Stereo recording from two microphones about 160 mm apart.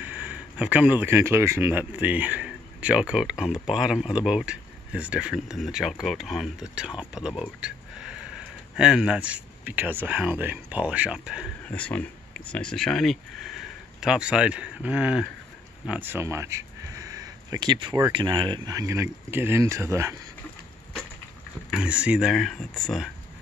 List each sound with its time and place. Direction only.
0.0 s speech: 10° right (ahead or behind)
11.7 s speech: 10° left (ahead or behind); by 15.2 s 5° right (ahead or behind)
15.9 s a sound: 10° right (ahead or behind); by 17.9 s 30° right (ahead or behind)
18.1 s speech: 30° right (ahead or behind)
21.6 s speech: 5° right (ahead or behind)